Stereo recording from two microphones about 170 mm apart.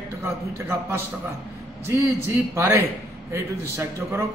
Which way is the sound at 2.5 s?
15° right (ahead or behind).